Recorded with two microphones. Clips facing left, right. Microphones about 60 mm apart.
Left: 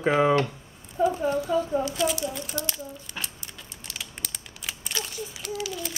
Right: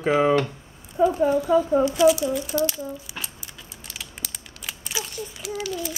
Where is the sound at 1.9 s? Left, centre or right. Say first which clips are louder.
Right 9 dB; centre.